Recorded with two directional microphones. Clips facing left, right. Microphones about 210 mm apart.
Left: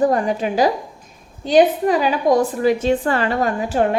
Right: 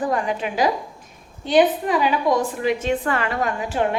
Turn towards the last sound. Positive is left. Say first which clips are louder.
# left 4 dB
turn(degrees=35)  # may be behind; listen again after turning